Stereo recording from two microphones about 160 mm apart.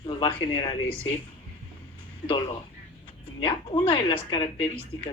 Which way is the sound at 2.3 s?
30° left (ahead or behind).